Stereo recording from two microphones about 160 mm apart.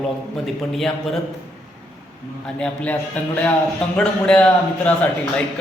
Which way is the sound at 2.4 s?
5° left (ahead or behind).